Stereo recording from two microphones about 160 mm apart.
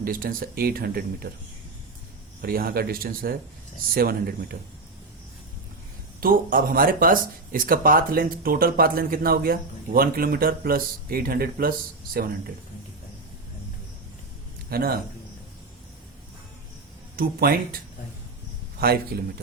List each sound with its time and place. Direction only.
0.0 s speech: 65° right (ahead or behind)
2.4 s speech: 65° right (ahead or behind)
6.1 s speech: 65° right (ahead or behind)
14.7 s a man's voice: 70° right (ahead or behind)
17.2 s speech: 65° right (ahead or behind)
18.8 s speech: 75° right (ahead or behind)